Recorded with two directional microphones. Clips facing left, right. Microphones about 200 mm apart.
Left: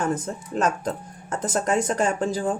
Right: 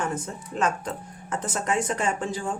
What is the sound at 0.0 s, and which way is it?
Speech, 40° left (ahead or behind).